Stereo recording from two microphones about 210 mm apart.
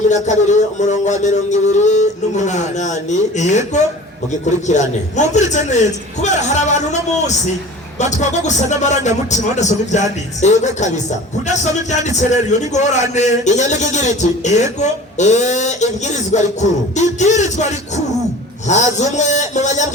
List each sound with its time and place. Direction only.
0.1 s a man's voice: 35° left (ahead or behind)